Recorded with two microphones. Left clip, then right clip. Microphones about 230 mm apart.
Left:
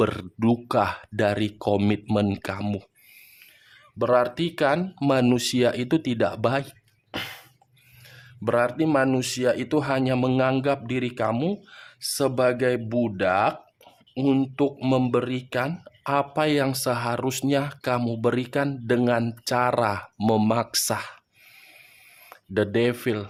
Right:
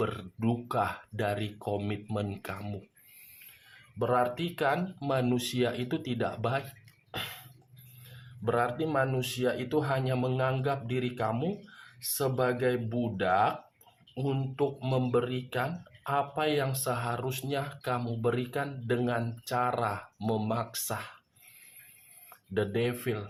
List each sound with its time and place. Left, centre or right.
0.0 s speech: left
3.9 s speech: left
8.1 s speech: left
22.3 s speech: left